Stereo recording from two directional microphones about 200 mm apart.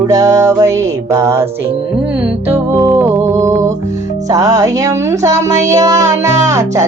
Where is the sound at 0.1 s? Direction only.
15° right (ahead or behind).